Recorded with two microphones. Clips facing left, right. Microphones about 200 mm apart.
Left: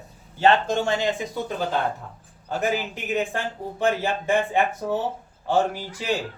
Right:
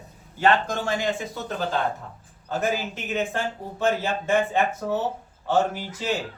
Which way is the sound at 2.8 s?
15° left (ahead or behind).